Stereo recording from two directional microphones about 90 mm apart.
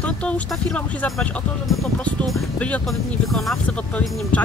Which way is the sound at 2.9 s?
Centre (ahead or behind).